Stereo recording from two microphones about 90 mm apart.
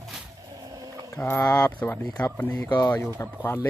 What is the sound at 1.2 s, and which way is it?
Speech, 35° left (ahead or behind).